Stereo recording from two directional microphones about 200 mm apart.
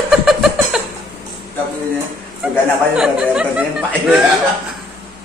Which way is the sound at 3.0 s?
5° right (ahead or behind).